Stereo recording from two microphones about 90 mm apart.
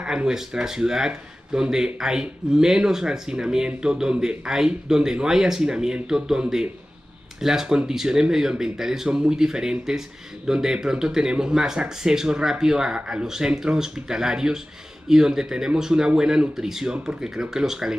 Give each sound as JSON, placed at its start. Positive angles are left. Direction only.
{"t": 0.0, "sound": "speech", "side_deg": -10}